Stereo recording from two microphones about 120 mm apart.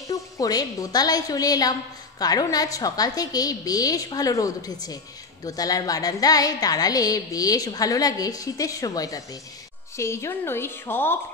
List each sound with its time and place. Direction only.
0.1 s a woman's voice: 30° left (ahead or behind)